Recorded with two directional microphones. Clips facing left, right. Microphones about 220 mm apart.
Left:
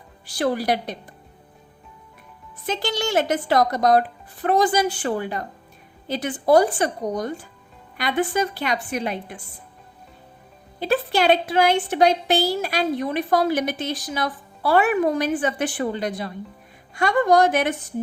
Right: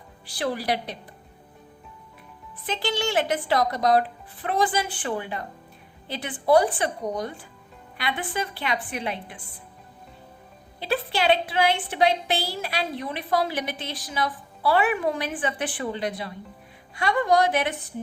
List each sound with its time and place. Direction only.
0.3 s a woman's voice: 45° left (ahead or behind)
2.6 s a woman's voice: 45° left (ahead or behind)
10.8 s a woman's voice: 45° left (ahead or behind)